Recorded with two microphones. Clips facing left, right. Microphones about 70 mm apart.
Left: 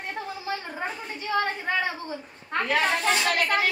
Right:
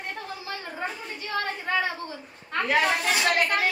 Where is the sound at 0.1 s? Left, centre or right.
Centre.